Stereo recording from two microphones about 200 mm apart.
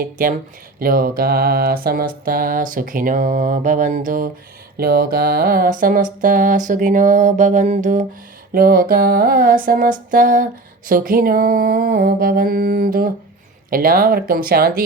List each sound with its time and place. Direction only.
0.0 s mantra: 45° right (ahead or behind)